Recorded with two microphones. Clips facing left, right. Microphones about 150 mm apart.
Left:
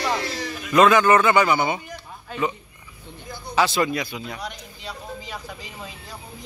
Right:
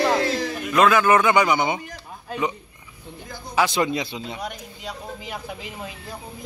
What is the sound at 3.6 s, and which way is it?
Speech, 15° right (ahead or behind).